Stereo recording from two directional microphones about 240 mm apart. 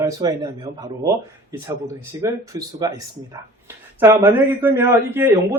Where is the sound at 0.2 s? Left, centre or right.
Centre.